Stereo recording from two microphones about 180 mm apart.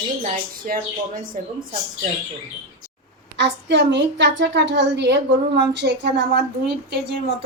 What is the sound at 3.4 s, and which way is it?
A woman's voice, 75° right (ahead or behind).